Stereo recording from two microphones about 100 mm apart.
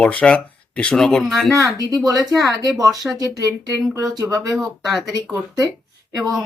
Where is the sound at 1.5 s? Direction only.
35° right (ahead or behind).